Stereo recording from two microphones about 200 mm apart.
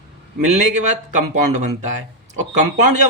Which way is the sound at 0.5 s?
35° right (ahead or behind).